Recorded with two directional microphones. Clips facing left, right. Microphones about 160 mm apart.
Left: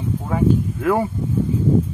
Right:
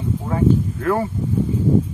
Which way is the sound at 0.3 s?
10° left (ahead or behind).